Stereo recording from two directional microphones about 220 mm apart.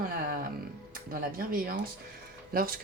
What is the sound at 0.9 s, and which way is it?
Speech, 40° right (ahead or behind).